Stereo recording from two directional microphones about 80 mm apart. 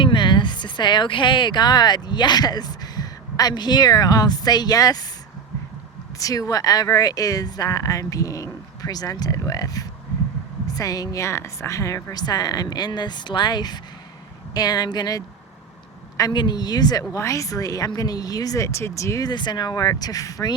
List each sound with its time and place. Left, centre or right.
0.0 s speech: left
6.1 s a woman's voice: left
16.3 s speech: left
19.2 s a woman's voice: left